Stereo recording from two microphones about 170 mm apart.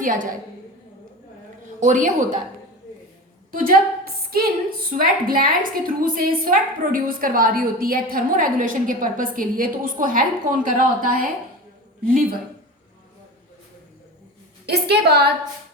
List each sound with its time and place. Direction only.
0.0 s a woman's voice: 50° right (ahead or behind)
1.8 s a woman's voice: 50° right (ahead or behind)
3.5 s a woman's voice: 55° right (ahead or behind)
14.7 s a woman's voice: 75° right (ahead or behind)